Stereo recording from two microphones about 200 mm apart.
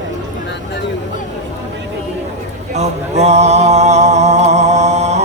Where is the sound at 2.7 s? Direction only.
35° right (ahead or behind).